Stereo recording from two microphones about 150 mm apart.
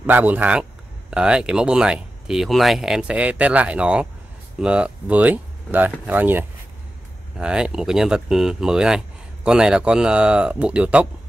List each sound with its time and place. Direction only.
0.0 s speech: 10° right (ahead or behind)